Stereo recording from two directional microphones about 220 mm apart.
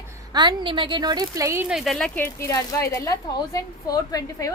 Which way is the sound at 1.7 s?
Centre (ahead or behind).